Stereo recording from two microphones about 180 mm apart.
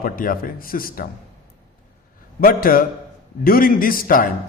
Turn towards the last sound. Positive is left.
turn(degrees=50)  # may be behind; listen again after turning